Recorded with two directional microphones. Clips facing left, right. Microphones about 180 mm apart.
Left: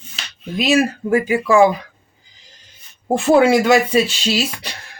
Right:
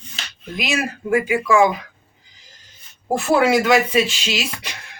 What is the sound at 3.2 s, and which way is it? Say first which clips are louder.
Speech: left 4 dB; 30° left (ahead or behind).